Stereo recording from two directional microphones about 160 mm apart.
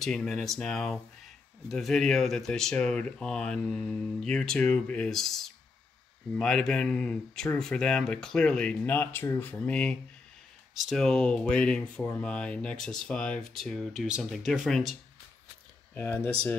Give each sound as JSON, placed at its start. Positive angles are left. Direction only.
{"t": 0.0, "sound": "speech", "side_deg": 5}
{"t": 15.9, "sound": "speech", "side_deg": 10}